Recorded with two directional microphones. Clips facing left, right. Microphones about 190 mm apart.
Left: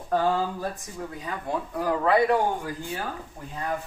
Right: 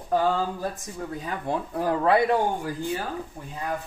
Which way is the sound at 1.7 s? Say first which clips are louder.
Right 1 dB; 30° right (ahead or behind).